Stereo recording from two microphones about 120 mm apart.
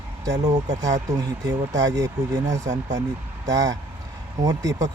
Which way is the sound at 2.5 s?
80° right.